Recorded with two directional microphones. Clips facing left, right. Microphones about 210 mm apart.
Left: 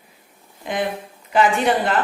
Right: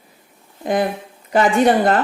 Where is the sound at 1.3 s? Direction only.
40° right (ahead or behind).